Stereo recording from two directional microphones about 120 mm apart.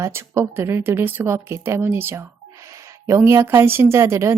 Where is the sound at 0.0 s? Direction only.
20° right (ahead or behind).